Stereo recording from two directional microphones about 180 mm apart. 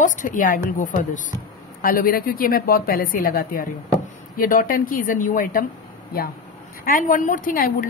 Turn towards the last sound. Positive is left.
turn(degrees=50)  # may be behind; listen again after turning